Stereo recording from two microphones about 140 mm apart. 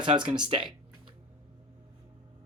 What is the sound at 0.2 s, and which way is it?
Speech, 35° right (ahead or behind).